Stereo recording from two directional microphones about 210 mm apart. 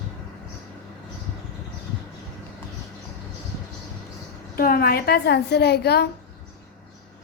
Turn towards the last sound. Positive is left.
turn(degrees=50)  # may be behind; listen again after turning